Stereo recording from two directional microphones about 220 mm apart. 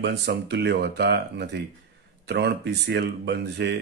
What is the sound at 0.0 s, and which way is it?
Speech, 50° right (ahead or behind).